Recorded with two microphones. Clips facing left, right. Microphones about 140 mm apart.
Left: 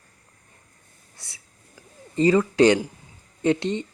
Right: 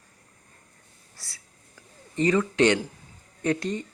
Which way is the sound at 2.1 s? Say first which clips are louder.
Left 4 dB; 30° left (ahead or behind).